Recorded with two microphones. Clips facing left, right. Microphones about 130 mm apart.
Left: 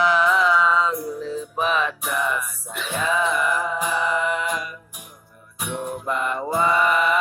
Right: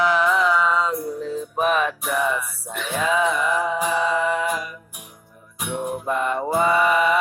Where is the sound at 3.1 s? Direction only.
70° right (ahead or behind).